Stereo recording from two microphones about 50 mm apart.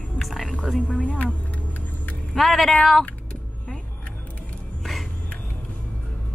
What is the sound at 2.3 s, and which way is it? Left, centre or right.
Speech, centre.